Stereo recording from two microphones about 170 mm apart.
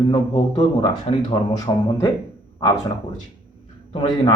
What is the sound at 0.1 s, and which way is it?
Speech, 30° left (ahead or behind).